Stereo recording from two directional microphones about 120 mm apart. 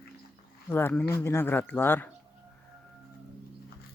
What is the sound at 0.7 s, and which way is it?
Speech, 15° left (ahead or behind).